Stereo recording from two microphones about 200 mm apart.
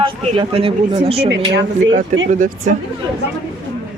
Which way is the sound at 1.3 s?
65° right (ahead or behind).